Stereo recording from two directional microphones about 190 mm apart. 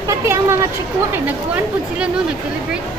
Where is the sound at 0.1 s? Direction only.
15° right (ahead or behind).